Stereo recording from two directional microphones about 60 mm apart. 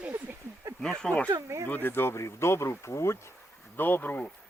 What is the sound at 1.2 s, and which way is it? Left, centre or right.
Speech, right.